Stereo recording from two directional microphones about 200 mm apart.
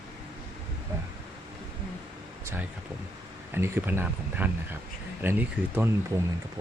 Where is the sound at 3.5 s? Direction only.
10° right (ahead or behind).